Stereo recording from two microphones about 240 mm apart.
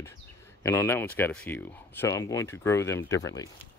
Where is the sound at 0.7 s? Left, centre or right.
Centre.